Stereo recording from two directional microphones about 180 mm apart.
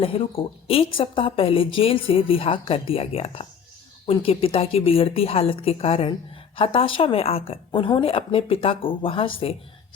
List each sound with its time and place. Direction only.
0.0 s a woman's voice: 30° left (ahead or behind)